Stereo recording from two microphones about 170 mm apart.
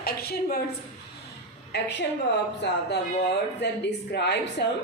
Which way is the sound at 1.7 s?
90° left.